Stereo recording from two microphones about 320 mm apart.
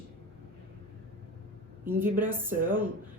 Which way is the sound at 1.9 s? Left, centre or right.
Centre.